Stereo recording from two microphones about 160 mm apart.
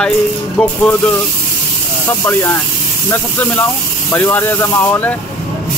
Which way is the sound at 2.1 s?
15° left (ahead or behind).